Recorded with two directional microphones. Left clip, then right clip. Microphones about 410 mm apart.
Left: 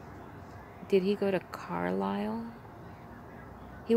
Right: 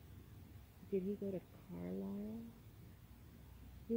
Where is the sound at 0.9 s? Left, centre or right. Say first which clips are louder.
Left 15 dB; left.